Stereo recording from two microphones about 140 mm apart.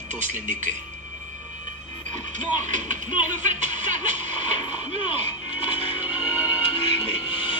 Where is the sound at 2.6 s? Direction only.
60° right (ahead or behind).